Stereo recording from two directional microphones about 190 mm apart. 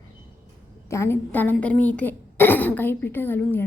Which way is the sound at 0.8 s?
15° left (ahead or behind).